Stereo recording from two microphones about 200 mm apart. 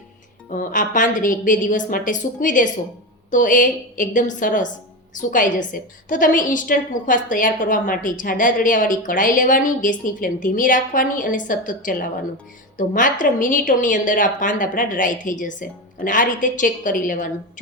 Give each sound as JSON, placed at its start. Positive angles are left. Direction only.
{"t": 0.5, "sound": "a woman's voice", "side_deg": 40}